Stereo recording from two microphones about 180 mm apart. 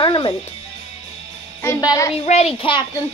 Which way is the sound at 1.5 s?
15° left (ahead or behind).